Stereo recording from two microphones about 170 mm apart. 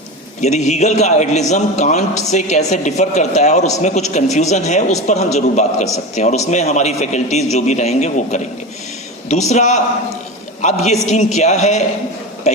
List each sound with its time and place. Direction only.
0.4 s a man's voice: 40° left (ahead or behind)